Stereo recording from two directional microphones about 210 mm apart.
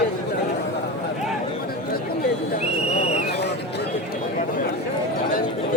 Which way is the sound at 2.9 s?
30° left (ahead or behind).